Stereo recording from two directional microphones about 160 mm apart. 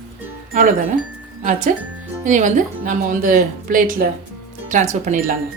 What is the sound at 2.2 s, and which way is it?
A woman's voice, 50° right (ahead or behind).